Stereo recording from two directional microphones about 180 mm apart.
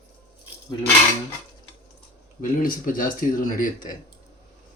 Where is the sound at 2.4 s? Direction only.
50° left (ahead or behind).